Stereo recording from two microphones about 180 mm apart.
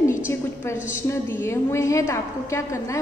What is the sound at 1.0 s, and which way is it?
A woman's voice, 15° left (ahead or behind).